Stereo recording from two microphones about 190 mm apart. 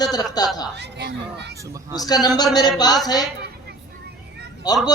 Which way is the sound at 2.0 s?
20° left (ahead or behind).